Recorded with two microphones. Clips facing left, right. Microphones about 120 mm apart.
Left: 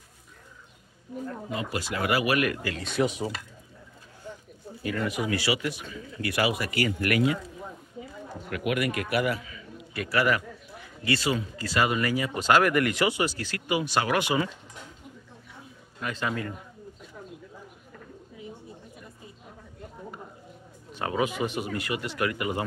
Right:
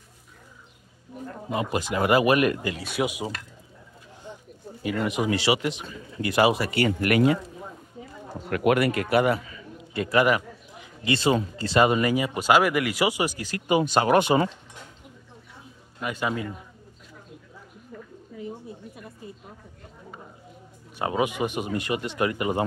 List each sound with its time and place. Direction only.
1.5 s speech: 20° right (ahead or behind)
2.8 s speech: 10° right (ahead or behind)
4.8 s speech: 20° right (ahead or behind)
8.5 s speech: 40° right (ahead or behind)
9.5 s a sound: 25° right (ahead or behind)
11.1 s speech: 25° right (ahead or behind)
13.7 s speech: 30° right (ahead or behind)
16.0 s speech: 15° right (ahead or behind)
21.0 s speech: 20° right (ahead or behind)